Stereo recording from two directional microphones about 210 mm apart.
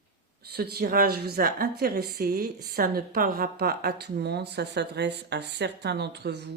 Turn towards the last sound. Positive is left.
turn(degrees=-55)  # may be behind; listen again after turning